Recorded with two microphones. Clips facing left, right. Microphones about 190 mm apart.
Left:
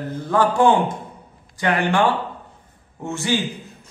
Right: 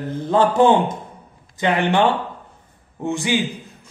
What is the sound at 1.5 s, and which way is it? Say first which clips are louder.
Speech: right 2 dB; 20° right (ahead or behind).